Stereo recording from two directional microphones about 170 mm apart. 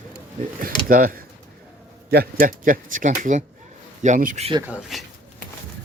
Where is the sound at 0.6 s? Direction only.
55° right (ahead or behind).